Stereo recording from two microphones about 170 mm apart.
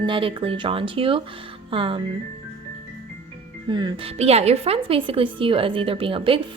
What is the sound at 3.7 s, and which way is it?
Speech, 25° right (ahead or behind).